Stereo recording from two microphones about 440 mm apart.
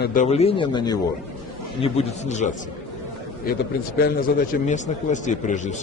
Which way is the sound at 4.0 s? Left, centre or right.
Centre.